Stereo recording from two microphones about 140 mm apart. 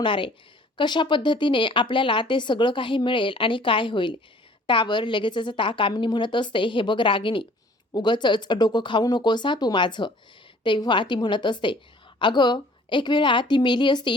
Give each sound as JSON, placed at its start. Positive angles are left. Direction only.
{"t": 0.0, "sound": "speech", "side_deg": 35}